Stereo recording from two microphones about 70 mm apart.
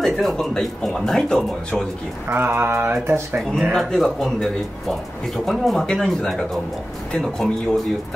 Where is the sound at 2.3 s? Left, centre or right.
Right.